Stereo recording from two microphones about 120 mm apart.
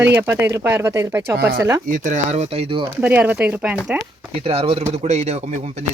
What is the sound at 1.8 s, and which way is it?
Speech, 90° right.